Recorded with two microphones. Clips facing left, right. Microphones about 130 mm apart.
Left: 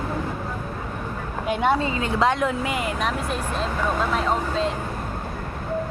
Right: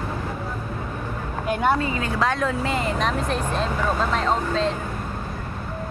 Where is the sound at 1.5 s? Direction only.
25° left (ahead or behind); by 4.7 s 5° left (ahead or behind).